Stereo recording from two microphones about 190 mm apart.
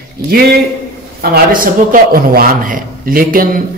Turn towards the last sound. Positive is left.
turn(degrees=-50)  # may be behind; listen again after turning